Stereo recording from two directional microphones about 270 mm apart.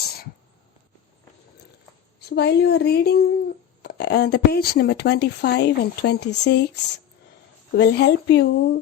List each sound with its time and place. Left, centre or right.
2.3 s speech: left